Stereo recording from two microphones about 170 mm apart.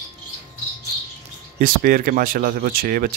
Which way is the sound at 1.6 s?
60° right (ahead or behind).